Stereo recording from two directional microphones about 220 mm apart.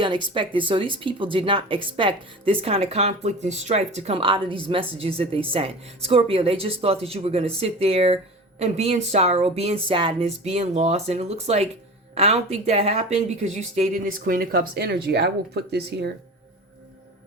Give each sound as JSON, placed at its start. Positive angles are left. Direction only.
{"t": 0.0, "sound": "speech", "side_deg": -20}